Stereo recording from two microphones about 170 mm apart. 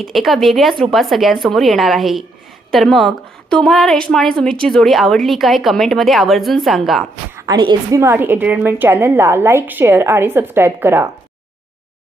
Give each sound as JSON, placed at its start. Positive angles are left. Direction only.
{"t": 0.0, "sound": "a woman's voice", "side_deg": 0}
{"t": 7.3, "sound": "a woman's voice", "side_deg": -20}